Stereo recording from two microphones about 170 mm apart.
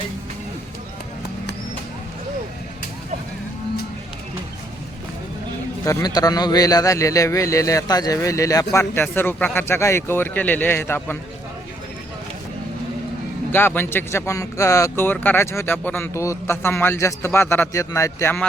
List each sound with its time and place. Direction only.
5.8 s a man's voice: 20° left (ahead or behind)
13.5 s speech: 15° left (ahead or behind)